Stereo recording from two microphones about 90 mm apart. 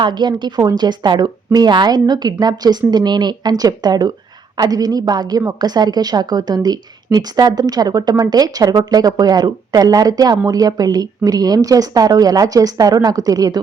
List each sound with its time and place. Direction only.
0.0 s a woman's voice: 55° right (ahead or behind)